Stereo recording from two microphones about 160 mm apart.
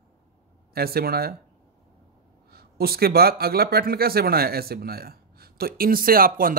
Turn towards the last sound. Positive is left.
turn(degrees=-65)  # may be behind; listen again after turning